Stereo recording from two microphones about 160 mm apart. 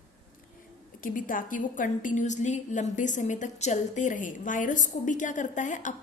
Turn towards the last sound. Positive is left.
turn(degrees=50)  # may be behind; listen again after turning